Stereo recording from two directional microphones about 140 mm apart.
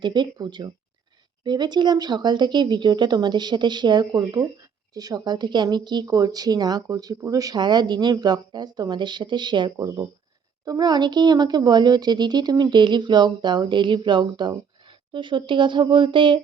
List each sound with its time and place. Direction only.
0.0 s a woman's voice: 35° right (ahead or behind)